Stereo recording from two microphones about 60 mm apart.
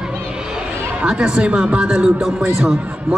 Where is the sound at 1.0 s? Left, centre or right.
Centre.